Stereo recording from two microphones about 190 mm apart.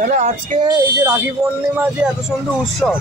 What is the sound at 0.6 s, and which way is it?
Speech, 20° right (ahead or behind).